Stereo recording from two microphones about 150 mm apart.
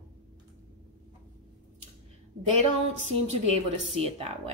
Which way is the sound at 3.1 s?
40° right (ahead or behind).